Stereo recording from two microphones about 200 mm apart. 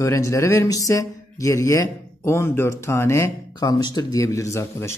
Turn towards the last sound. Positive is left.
turn(degrees=15)  # may be behind; listen again after turning